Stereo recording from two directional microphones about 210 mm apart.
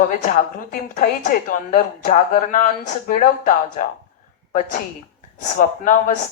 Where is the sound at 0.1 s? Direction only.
40° left (ahead or behind).